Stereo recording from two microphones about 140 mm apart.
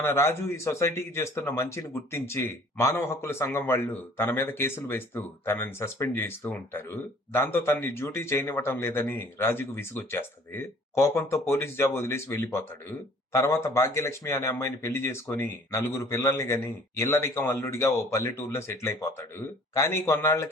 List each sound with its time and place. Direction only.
0.0 s speech: 20° left (ahead or behind)